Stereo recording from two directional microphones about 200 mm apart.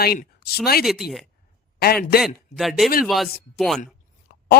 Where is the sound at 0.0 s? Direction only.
50° left (ahead or behind).